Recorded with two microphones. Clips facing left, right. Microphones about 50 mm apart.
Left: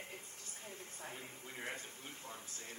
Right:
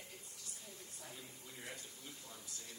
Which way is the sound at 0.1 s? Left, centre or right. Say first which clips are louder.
Left 4 dB; left.